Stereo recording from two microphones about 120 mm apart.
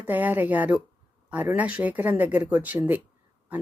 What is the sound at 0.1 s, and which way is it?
Speech, 15° right (ahead or behind).